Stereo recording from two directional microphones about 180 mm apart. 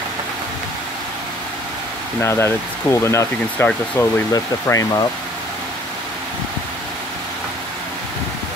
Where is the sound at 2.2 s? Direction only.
15° left (ahead or behind).